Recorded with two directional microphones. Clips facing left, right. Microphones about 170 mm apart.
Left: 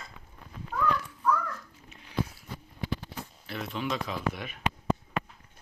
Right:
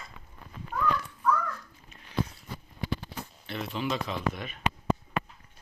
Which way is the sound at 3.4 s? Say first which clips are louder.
Right 1 dB; centre (ahead or behind).